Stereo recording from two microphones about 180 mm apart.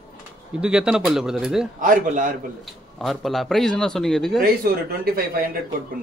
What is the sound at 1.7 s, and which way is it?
Speech, 45° right (ahead or behind).